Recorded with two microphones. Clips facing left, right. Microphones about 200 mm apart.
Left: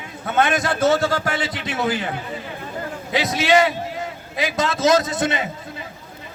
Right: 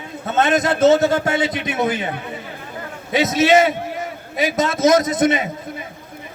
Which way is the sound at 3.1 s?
20° right (ahead or behind).